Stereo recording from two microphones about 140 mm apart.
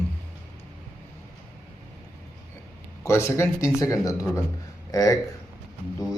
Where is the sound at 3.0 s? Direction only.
20° left (ahead or behind).